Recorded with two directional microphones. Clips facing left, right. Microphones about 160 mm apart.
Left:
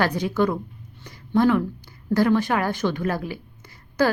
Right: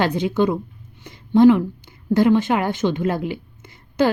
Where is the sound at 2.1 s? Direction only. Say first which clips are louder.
Right 3 dB; 20° right (ahead or behind).